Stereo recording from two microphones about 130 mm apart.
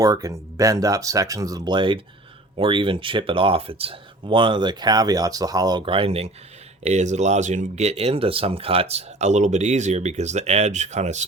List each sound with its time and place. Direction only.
0.0 s speech: 25° right (ahead or behind); by 11.3 s 65° right (ahead or behind)